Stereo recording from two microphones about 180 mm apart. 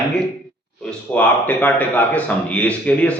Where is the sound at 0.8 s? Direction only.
10° left (ahead or behind).